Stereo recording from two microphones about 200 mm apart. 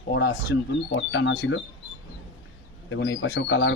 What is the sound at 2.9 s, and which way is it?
Speech, 60° left (ahead or behind).